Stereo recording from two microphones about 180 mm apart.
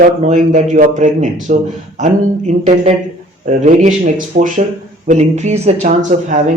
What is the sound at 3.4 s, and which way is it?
Speech, 40° right (ahead or behind).